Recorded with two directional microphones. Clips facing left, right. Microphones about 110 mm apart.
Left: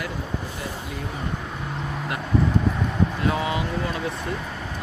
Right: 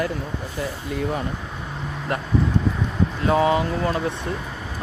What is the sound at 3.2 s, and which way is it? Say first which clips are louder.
Speech: right 6 dB; 35° right (ahead or behind).